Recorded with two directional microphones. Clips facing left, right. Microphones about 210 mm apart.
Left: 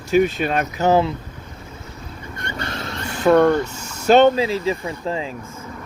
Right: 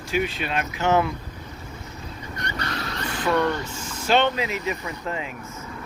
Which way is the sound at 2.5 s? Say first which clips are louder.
Left 2 dB; 25° left (ahead or behind).